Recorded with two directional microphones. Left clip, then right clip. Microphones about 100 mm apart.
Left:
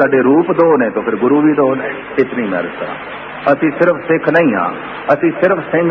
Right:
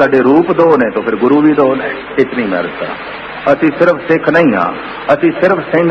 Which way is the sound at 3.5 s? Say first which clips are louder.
Right 2 dB; 25° left (ahead or behind).